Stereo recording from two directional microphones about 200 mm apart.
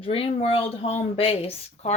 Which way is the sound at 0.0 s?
25° left (ahead or behind).